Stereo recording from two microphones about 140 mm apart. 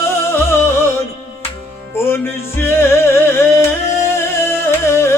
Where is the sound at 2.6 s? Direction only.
15° left (ahead or behind).